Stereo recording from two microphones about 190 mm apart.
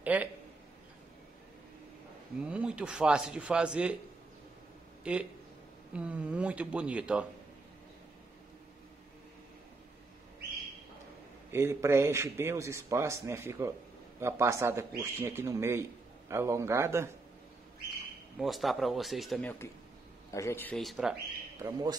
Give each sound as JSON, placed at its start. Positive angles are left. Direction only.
{"t": 0.0, "sound": "a man's voice", "side_deg": -10}
{"t": 2.4, "sound": "speech", "side_deg": -5}
{"t": 5.1, "sound": "a man's voice", "side_deg": -5}
{"t": 11.5, "sound": "a man's voice", "side_deg": -15}
{"t": 18.4, "sound": "speech", "side_deg": 0}
{"t": 21.5, "sound": "a man's voice", "side_deg": -15}